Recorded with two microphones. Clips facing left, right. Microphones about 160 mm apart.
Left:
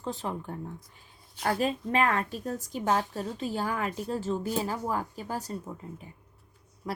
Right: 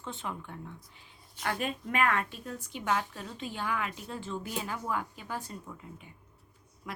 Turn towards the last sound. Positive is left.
turn(degrees=35)  # may be behind; listen again after turning